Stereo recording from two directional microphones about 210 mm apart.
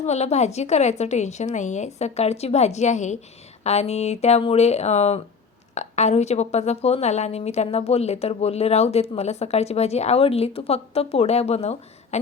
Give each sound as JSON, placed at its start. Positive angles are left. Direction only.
{"t": 0.0, "sound": "a woman's voice", "side_deg": 30}